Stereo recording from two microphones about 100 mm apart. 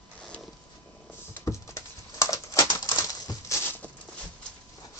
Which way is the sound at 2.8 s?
50° left (ahead or behind).